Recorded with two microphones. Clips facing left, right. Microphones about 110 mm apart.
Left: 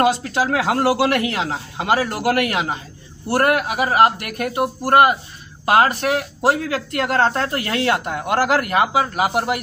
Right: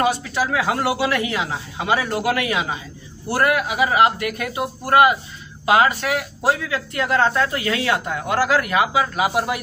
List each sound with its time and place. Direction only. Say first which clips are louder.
0.0 s a man's voice: left 3 dB; 60° left (ahead or behind)
0.9 s a man's voice: left 3 dB; 65° left (ahead or behind)
5.7 s speech: left 1 dB; 50° left (ahead or behind)
7.2 s speech: even; 45° left (ahead or behind)